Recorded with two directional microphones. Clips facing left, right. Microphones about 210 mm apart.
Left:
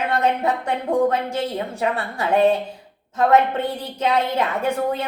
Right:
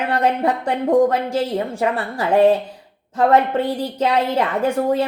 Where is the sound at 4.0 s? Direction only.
30° right (ahead or behind).